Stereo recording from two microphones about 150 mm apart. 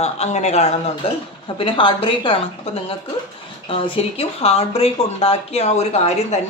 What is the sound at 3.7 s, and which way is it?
Speech, 35° left (ahead or behind).